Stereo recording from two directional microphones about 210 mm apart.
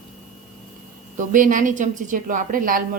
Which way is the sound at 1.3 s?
40° right (ahead or behind).